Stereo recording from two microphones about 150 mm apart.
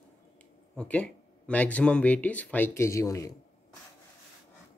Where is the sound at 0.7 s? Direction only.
5° left (ahead or behind).